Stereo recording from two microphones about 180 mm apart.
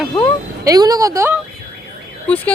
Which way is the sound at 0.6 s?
20° right (ahead or behind).